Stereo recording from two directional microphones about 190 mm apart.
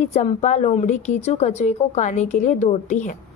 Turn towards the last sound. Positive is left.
turn(degrees=40)  # may be behind; listen again after turning